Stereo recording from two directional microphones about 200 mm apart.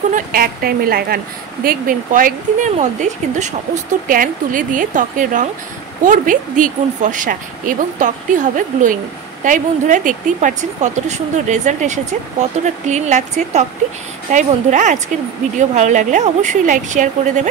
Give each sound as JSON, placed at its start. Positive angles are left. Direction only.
{"t": 0.1, "sound": "a woman's voice", "side_deg": -45}